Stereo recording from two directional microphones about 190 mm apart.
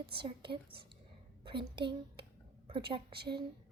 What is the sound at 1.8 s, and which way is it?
A woman's voice, 25° right (ahead or behind).